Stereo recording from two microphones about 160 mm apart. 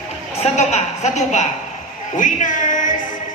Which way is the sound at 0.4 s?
45° left (ahead or behind).